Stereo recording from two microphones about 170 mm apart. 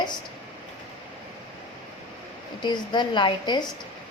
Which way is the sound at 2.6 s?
25° left (ahead or behind).